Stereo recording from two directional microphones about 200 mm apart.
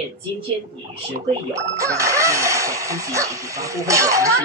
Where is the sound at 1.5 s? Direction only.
15° right (ahead or behind).